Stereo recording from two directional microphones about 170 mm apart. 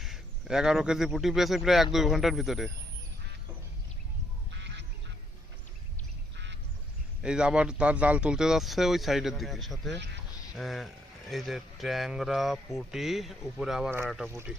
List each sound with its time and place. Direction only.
0.0 s speech: centre (ahead or behind)
4.5 s duck: 90° right
6.3 s duck: 90° right
7.2 s speech: 5° right (ahead or behind)